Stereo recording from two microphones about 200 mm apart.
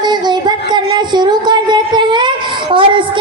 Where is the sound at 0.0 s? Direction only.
20° right (ahead or behind).